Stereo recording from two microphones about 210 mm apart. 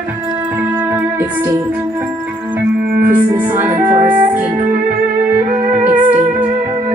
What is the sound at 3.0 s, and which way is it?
Music, 10° right (ahead or behind).